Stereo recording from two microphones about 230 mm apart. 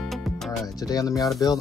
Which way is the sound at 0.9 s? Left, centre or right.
Centre.